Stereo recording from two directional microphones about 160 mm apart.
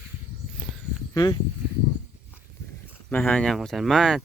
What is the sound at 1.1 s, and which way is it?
Speech, 25° left (ahead or behind).